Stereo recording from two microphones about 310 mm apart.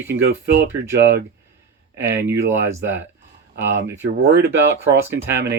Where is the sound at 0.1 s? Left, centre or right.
Right.